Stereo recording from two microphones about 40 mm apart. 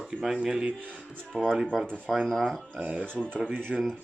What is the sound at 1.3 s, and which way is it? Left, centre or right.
Speech, centre.